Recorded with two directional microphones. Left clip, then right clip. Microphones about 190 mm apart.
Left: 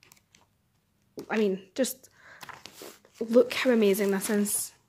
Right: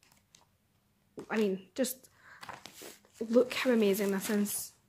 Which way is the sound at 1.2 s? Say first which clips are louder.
Left 4 dB; 15° left (ahead or behind).